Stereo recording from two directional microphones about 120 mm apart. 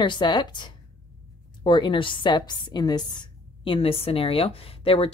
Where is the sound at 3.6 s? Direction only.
50° left (ahead or behind).